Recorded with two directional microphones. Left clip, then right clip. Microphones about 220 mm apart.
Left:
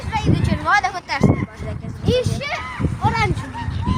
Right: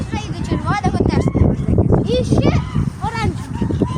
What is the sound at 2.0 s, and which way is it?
Speech, 40° left (ahead or behind).